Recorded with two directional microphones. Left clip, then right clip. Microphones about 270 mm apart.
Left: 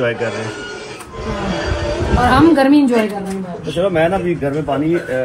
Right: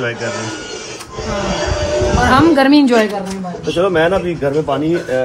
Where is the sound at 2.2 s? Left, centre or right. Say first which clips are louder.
Even; centre.